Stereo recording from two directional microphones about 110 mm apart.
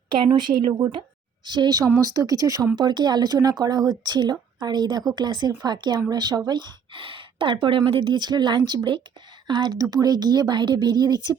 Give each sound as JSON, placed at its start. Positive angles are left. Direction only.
{"t": 0.1, "sound": "a woman's voice", "side_deg": -45}